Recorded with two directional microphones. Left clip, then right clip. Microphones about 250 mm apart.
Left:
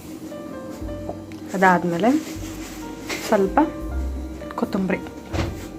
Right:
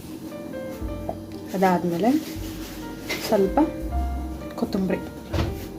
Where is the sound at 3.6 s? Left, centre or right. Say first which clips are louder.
Left 2 dB; centre.